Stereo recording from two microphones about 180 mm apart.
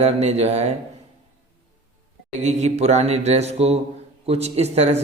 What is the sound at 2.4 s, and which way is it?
Speech, 40° right (ahead or behind).